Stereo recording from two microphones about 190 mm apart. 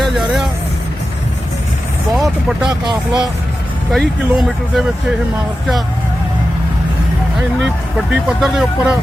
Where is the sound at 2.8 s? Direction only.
25° right (ahead or behind).